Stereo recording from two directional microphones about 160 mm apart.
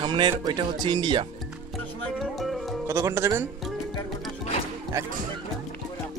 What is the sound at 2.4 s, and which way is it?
Music, centre (ahead or behind).